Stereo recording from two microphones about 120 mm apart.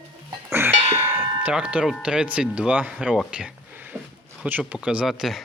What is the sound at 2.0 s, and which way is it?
Speech, 10° right (ahead or behind).